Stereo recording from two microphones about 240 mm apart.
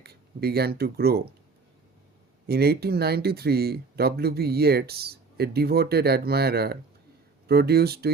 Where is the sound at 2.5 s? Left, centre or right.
Right.